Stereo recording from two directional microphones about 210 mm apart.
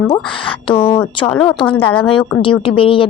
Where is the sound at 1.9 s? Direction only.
5° left (ahead or behind).